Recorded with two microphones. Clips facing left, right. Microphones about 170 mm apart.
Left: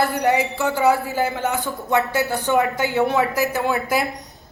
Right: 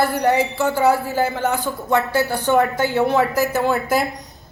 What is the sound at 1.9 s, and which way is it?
Speech, 20° left (ahead or behind).